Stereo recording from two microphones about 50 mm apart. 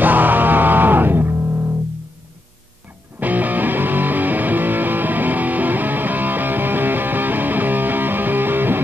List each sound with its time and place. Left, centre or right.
0.0 s music: right
3.2 s music: right